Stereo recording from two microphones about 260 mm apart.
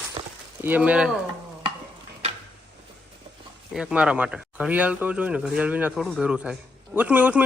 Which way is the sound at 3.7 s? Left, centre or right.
Centre.